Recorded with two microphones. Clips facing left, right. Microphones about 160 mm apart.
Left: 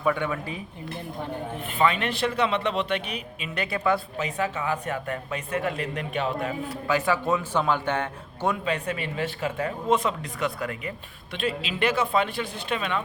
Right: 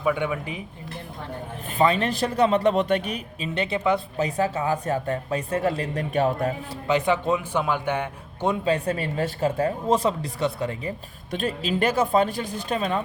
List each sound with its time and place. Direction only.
0.0 s speech: 10° right (ahead or behind)
1.8 s speech: 35° right (ahead or behind)
3.5 s speech: 25° right (ahead or behind)
4.2 s speech: 35° right (ahead or behind)
6.8 s speech: 20° right (ahead or behind)
8.6 s speech: 35° right (ahead or behind)
11.3 s speech: 45° right (ahead or behind)